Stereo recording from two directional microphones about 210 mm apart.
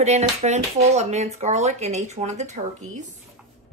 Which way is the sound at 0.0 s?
30° right (ahead or behind).